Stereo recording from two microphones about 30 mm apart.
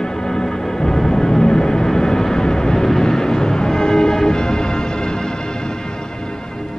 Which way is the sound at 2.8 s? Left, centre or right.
Centre.